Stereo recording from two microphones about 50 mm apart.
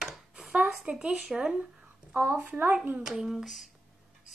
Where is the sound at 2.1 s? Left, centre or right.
Right.